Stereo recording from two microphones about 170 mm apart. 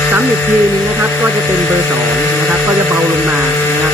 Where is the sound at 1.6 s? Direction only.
10° left (ahead or behind).